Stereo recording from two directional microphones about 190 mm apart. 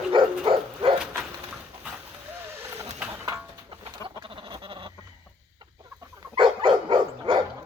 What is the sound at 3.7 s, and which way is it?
Chicken, 25° right (ahead or behind).